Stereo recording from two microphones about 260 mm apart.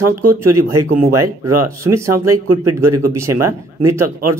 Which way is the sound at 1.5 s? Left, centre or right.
Right.